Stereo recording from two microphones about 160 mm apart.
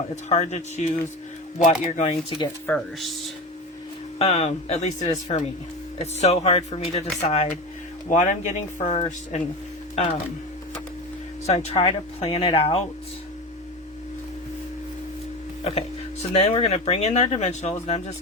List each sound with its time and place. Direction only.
0.3 s speech: 45° left (ahead or behind)
2.6 s speech: 5° left (ahead or behind)
4.2 s speech: 40° left (ahead or behind)
11.4 s speech: 45° left (ahead or behind)
16.3 s speech: 40° left (ahead or behind)